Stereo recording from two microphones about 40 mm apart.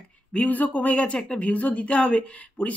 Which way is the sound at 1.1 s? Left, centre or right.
Centre.